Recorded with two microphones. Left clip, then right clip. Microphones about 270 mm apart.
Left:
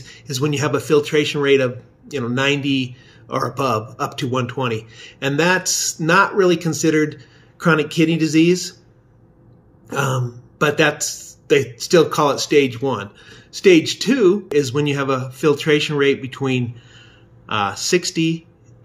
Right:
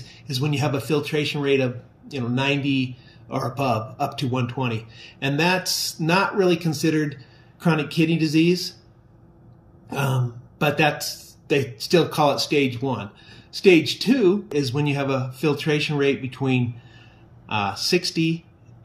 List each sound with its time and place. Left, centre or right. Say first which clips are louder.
0.1 s speech: left 5 dB; centre
9.9 s speech: left 5 dB; centre